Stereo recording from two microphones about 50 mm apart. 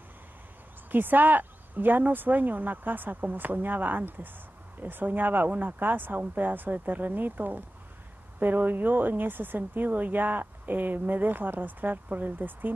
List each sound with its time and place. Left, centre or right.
0.9 s speech: right